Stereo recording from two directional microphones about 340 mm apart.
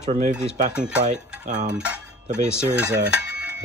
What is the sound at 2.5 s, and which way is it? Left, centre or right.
Cutlery, centre.